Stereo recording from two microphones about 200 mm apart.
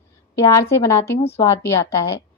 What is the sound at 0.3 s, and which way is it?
A woman's voice, 15° left (ahead or behind).